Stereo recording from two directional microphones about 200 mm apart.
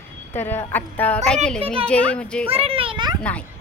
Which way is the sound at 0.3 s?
10° left (ahead or behind).